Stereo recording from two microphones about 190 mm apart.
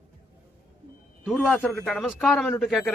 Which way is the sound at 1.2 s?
Centre (ahead or behind).